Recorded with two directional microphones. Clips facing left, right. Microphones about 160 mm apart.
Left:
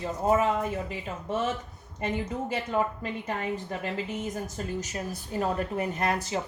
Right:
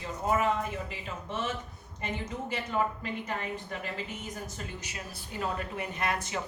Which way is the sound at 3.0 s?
35° left (ahead or behind).